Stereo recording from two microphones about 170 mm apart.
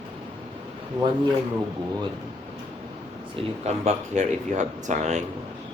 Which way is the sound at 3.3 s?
40° right (ahead or behind).